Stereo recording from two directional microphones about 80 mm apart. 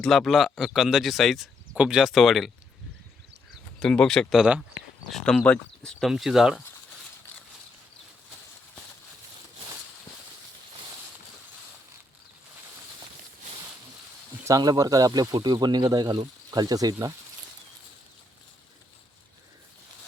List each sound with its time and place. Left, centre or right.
0.0 s speech: centre
1.7 s speech: centre
3.8 s speech: centre
6.1 s speech: centre
14.4 s speech: right